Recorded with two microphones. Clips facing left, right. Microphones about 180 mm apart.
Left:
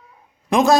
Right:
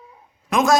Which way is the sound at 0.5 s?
35° left (ahead or behind).